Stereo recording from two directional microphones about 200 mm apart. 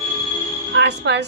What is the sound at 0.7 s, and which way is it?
Speech, 60° right (ahead or behind).